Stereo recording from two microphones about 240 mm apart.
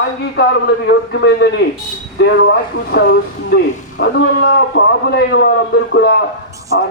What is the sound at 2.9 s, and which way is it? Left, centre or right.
Speech, left.